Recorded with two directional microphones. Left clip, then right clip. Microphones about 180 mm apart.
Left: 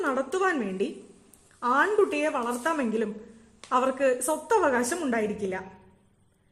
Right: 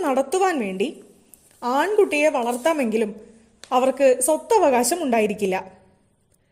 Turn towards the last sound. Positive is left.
turn(degrees=-25)  # may be behind; listen again after turning